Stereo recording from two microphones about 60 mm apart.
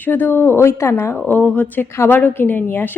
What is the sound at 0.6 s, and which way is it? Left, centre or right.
Speech, left.